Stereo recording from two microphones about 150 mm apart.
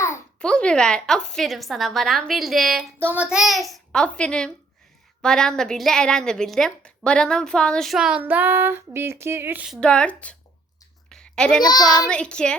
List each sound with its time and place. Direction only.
0.3 s a woman's voice: 5° left (ahead or behind); by 9.7 s 10° right (ahead or behind)
9.8 s a woman's voice: 5° left (ahead or behind)
11.1 s a sound: 5° left (ahead or behind)
11.6 s a child's voice: 25° left (ahead or behind)
12.0 s a woman's voice: 5° left (ahead or behind)